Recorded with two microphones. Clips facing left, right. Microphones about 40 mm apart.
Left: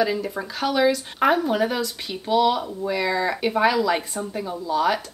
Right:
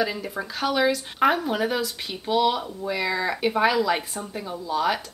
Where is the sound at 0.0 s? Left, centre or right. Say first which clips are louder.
Left 3 dB; centre.